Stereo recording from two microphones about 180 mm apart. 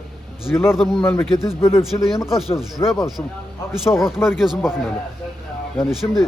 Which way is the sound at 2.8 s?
15° left (ahead or behind).